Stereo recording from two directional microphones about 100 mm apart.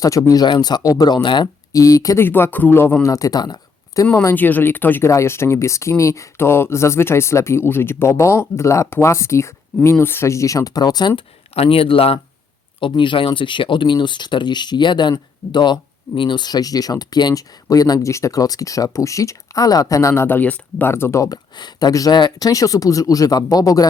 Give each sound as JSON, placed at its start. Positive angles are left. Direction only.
{"t": 0.0, "sound": "speech", "side_deg": 35}
{"t": 1.7, "sound": "speech", "side_deg": 35}
{"t": 2.2, "sound": "speech", "side_deg": 20}
{"t": 4.2, "sound": "speech", "side_deg": 20}
{"t": 11.5, "sound": "speech", "side_deg": 75}
{"t": 12.8, "sound": "speech", "side_deg": 55}
{"t": 20.9, "sound": "speech", "side_deg": 25}
{"t": 21.6, "sound": "speech", "side_deg": 40}